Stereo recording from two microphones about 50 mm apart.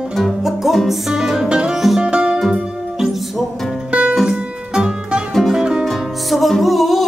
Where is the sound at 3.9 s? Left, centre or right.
Right.